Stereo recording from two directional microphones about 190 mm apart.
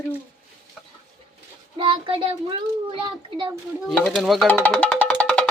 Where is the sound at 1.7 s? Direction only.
25° right (ahead or behind).